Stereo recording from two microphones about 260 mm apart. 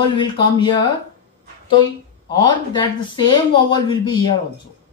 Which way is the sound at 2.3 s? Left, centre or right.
Centre.